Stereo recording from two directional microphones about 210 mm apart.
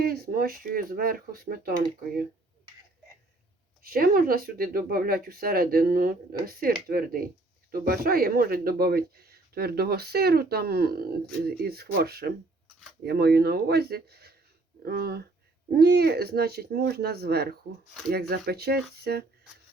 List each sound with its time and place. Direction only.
0.0 s speech: 45° right (ahead or behind)
3.8 s speech: 45° right (ahead or behind)